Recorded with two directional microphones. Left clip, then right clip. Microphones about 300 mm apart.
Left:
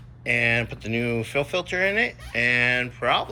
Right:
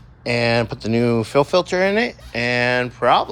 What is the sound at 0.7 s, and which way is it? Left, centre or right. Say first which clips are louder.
Speech: right 7 dB; right.